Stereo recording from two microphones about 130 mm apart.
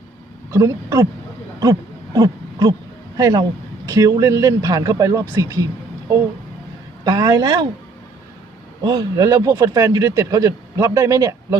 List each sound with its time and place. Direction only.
0.5 s speech: 20° right (ahead or behind)
2.1 s speech: 25° right (ahead or behind)
7.0 s speech: 30° right (ahead or behind)
8.8 s speech: 35° right (ahead or behind)